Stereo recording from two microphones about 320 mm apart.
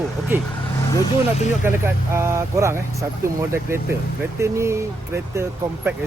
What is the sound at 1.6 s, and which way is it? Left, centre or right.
Speech, centre.